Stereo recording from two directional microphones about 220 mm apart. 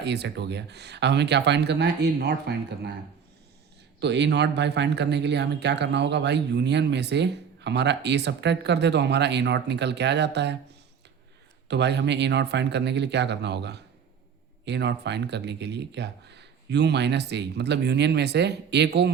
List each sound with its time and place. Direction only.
0.0 s speech: 50° right (ahead or behind)
4.0 s speech: 50° right (ahead or behind)
11.7 s speech: 50° right (ahead or behind)